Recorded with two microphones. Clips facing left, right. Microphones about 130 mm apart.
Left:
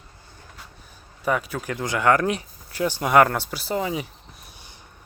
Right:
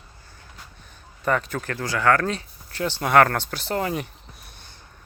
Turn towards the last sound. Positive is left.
turn(degrees=15)  # may be behind; listen again after turning